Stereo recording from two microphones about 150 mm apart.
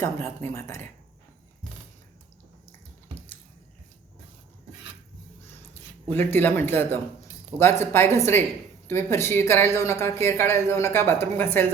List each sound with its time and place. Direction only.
0.0 s a woman's voice: 15° left (ahead or behind)
6.1 s a woman's voice: 15° left (ahead or behind)